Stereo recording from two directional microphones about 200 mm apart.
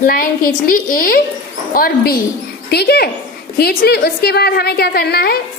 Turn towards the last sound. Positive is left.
turn(degrees=50)  # may be behind; listen again after turning